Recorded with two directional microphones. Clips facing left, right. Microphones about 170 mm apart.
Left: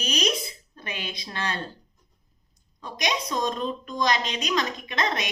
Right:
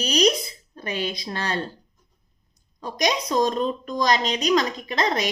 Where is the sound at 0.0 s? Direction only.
35° right (ahead or behind).